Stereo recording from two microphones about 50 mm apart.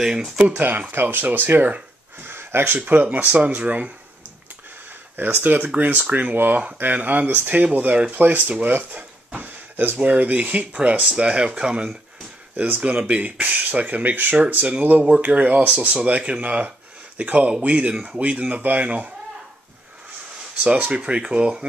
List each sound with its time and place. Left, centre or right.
0.0 s speech: centre
0.6 s speech: right
2.1 s a sound: right
2.8 s speech: right
5.1 s speech: right; by 11.8 s centre
12.5 s speech: right
20.6 s speech: right